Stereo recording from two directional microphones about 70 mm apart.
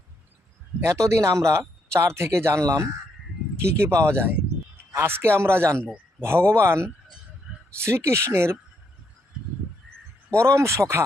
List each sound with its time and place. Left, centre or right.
0.8 s speech: right
10.3 s speech: right